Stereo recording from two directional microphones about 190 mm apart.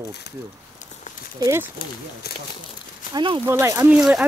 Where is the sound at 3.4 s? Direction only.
15° right (ahead or behind).